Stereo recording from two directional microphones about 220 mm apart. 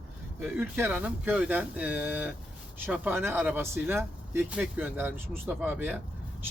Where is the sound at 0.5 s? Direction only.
10° right (ahead or behind).